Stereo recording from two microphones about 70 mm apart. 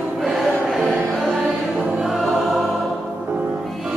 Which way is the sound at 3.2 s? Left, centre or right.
Right.